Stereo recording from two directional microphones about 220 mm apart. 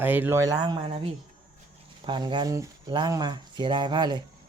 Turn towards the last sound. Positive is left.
turn(degrees=-20)  # may be behind; listen again after turning